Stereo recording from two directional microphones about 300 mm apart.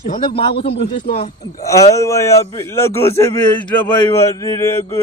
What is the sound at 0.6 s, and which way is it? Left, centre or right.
Speech, left.